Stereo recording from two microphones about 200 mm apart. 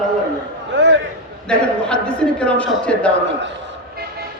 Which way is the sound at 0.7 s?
60° right (ahead or behind).